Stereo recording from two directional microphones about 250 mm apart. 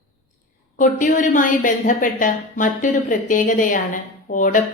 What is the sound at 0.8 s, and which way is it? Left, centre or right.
A woman's voice, left.